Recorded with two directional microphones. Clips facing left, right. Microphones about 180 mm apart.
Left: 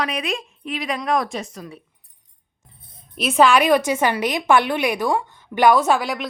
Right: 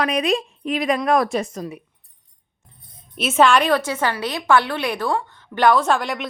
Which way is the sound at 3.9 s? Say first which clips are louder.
Left 3 dB; 15° left (ahead or behind).